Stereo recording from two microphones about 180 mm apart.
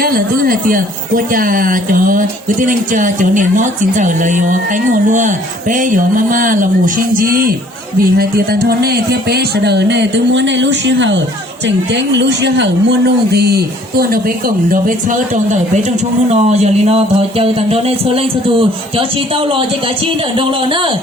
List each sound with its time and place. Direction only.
0.0 s speech: 50° right (ahead or behind); by 11.2 s 85° right
11.6 s speech: 75° right (ahead or behind); by 15.8 s 45° right (ahead or behind)
16.3 s music: 35° right (ahead or behind)
18.9 s speech: 30° right (ahead or behind)